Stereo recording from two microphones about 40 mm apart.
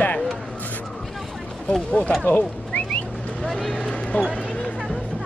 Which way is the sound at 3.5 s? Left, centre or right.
Left.